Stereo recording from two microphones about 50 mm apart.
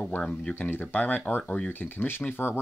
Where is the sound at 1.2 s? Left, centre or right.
Left.